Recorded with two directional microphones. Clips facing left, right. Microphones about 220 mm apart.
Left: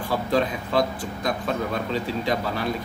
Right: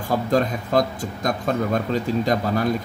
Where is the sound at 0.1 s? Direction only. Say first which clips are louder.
Right 3 dB; 45° right (ahead or behind).